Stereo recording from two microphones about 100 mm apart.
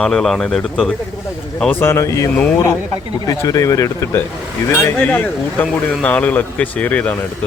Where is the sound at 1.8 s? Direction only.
25° left (ahead or behind).